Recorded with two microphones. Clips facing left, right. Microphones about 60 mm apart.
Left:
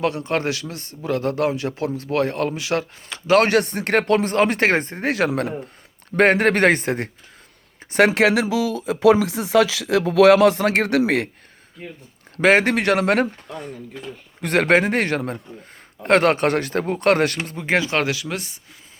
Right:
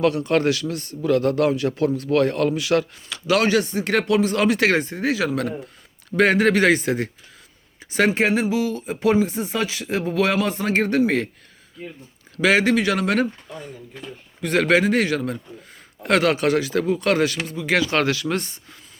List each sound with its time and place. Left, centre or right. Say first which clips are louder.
0.0 s a man's voice: right 3 dB; left
3.4 s speech: left 1 dB; left
7.9 s speech: left 3 dB; left
12.4 s speech: left 1 dB; left
17.7 s a man's voice: even; left
17.9 s speech: right 2 dB; centre